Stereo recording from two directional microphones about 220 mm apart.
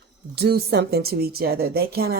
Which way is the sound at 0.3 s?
45° right (ahead or behind).